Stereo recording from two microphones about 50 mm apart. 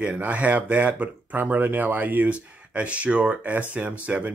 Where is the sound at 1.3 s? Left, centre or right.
Right.